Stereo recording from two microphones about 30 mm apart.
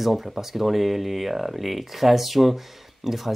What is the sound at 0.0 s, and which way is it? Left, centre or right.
Speech, centre.